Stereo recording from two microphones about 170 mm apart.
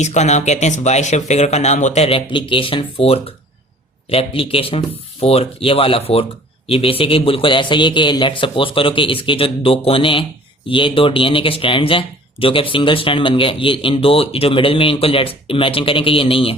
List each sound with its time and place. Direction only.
0.0 s speech: 40° left (ahead or behind)